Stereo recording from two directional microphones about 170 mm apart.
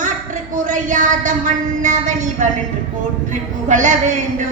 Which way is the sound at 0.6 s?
45° right (ahead or behind).